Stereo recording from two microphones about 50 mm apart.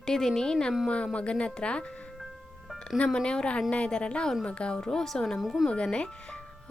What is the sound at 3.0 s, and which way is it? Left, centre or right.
Speech, centre.